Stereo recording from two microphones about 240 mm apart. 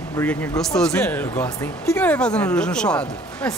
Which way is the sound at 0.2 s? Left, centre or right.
Centre.